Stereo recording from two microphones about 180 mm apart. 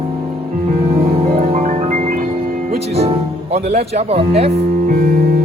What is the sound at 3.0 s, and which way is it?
Speech, 35° right (ahead or behind).